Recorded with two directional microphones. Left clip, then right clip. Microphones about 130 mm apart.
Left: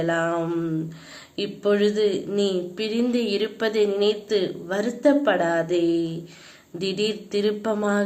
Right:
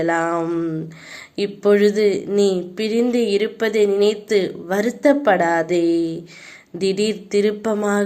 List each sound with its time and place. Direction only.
0.0 s speech: 40° right (ahead or behind)
1.4 s speech: 40° right (ahead or behind)